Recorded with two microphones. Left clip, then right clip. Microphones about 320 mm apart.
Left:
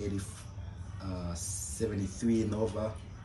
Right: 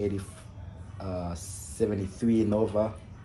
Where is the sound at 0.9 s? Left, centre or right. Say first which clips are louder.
Right 7 dB; centre.